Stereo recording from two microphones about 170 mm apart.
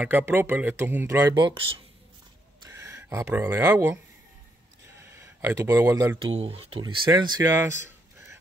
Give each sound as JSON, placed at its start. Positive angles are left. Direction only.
{"t": 0.0, "sound": "speech", "side_deg": -10}
{"t": 2.7, "sound": "speech", "side_deg": -20}
{"t": 5.2, "sound": "speech", "side_deg": -15}
{"t": 6.2, "sound": "speech", "side_deg": -35}
{"t": 7.1, "sound": "speech", "side_deg": -20}